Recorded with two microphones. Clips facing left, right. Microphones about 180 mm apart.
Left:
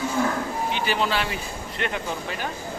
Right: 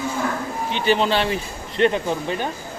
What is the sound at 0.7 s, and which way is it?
Speech, 25° right (ahead or behind).